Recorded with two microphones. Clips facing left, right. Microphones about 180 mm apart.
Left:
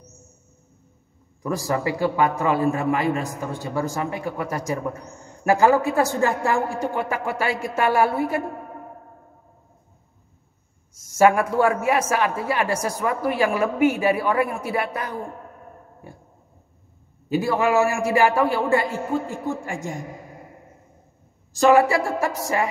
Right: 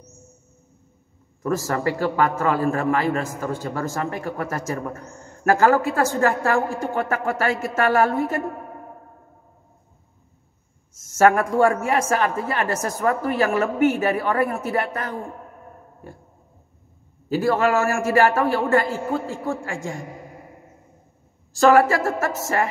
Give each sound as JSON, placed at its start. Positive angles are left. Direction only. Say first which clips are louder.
{"t": 1.4, "sound": "a man's voice", "louder": "right 1 dB", "side_deg": 15}
{"t": 11.1, "sound": "a man's voice", "louder": "right 1 dB", "side_deg": 10}
{"t": 17.3, "sound": "a man's voice", "louder": "right 1 dB", "side_deg": 15}
{"t": 21.6, "sound": "a man's voice", "louder": "right 1 dB", "side_deg": 15}